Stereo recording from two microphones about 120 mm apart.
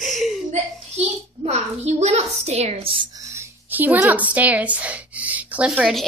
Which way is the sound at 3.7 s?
15° right (ahead or behind).